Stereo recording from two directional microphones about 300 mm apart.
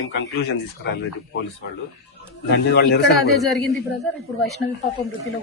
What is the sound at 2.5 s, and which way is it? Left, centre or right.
Speech, left.